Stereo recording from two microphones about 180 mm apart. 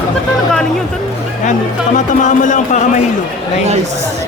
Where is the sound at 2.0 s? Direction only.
45° left (ahead or behind).